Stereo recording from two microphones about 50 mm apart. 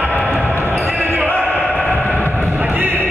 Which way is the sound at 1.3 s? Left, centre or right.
Left.